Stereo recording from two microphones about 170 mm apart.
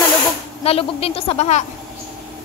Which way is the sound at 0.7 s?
35° left (ahead or behind).